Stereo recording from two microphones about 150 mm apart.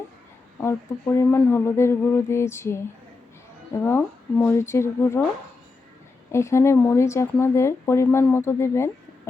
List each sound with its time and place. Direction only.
0.6 s speech: 15° left (ahead or behind)
3.8 s speech: 15° left (ahead or behind)
6.3 s speech: 20° left (ahead or behind)